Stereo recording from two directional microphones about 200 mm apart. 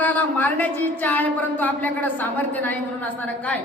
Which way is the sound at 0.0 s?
10° left (ahead or behind).